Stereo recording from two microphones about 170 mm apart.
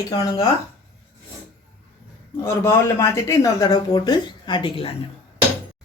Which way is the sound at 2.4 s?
15° left (ahead or behind).